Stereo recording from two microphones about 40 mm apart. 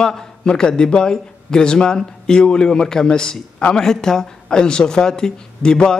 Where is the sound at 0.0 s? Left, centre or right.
Centre.